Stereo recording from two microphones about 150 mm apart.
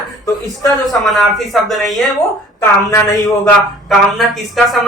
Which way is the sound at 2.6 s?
20° left (ahead or behind).